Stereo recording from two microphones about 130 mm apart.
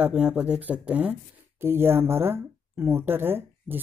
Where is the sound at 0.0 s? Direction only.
10° right (ahead or behind).